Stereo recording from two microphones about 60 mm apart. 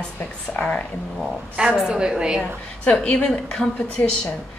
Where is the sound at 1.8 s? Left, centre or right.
Centre.